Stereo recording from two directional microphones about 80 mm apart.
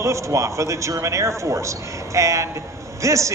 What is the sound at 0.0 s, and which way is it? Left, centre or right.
A man's voice, right.